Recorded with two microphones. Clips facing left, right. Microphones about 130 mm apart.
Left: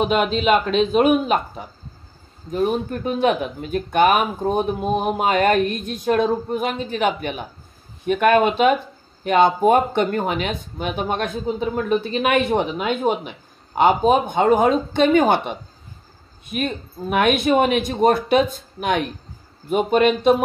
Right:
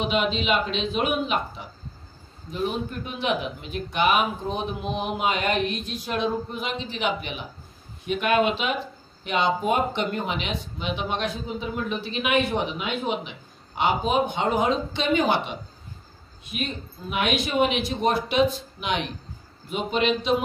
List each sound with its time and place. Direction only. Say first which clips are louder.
0.0 s speech: left 6 dB; 45° left (ahead or behind)